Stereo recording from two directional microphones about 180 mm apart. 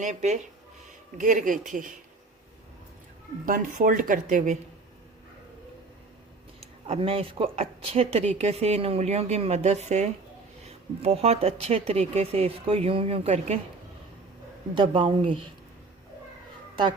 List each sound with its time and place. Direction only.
0.0 s speech: 40° right (ahead or behind)
3.4 s speech: 50° right (ahead or behind)
6.8 s speech: 35° right (ahead or behind)
14.8 s speech: 30° right (ahead or behind)